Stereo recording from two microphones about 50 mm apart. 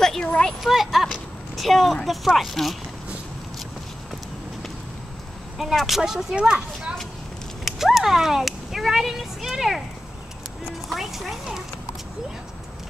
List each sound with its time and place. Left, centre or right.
0.2 s a sound: centre
0.6 s speech: centre
5.6 s speech: centre
7.6 s speech: centre
10.9 s speech: centre